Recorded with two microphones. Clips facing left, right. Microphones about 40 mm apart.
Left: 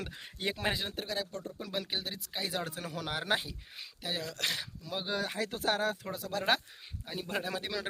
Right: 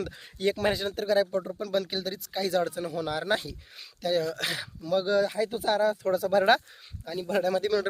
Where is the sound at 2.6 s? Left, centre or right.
Left.